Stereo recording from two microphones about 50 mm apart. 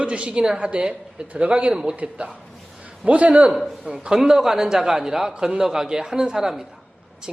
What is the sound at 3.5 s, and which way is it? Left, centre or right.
A man's voice, centre.